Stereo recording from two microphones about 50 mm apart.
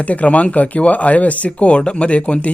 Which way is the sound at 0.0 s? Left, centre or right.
Left.